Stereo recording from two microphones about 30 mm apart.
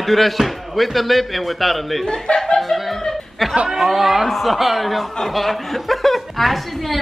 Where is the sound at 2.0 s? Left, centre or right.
Left.